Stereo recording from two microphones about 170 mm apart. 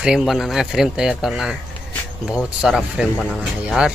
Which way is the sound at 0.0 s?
5° right (ahead or behind).